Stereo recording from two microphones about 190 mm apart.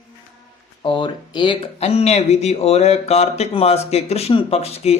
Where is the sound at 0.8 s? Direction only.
25° left (ahead or behind).